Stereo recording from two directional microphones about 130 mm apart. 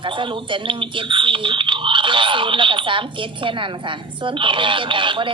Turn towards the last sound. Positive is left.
turn(degrees=-40)  # may be behind; listen again after turning